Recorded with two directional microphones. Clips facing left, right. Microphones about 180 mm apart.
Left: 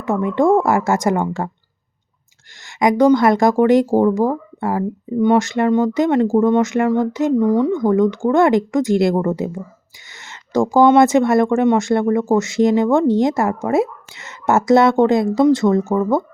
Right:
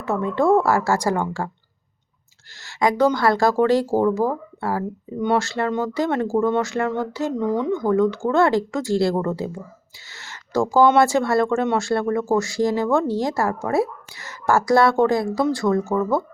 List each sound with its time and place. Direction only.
0.0 s speech: 15° left (ahead or behind)
2.6 s speech: 20° left (ahead or behind)